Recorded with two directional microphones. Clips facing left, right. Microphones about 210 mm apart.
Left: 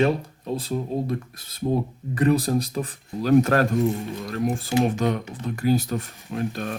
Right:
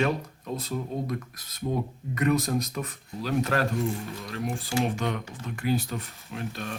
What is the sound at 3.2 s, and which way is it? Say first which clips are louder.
Speech: left 8 dB; 45° left (ahead or behind).